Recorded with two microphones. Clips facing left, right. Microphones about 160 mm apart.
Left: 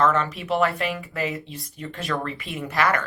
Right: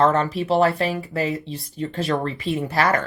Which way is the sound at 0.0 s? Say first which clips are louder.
Right 3 dB; 35° right (ahead or behind).